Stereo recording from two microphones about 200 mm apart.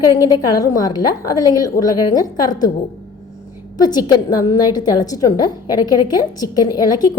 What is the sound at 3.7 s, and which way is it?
A woman's voice, 20° left (ahead or behind).